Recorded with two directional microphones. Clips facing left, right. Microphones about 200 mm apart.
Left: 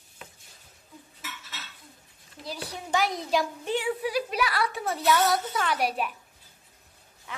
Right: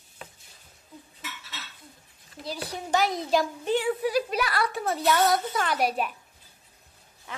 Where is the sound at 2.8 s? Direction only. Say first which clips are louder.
Right 2 dB; 40° right (ahead or behind).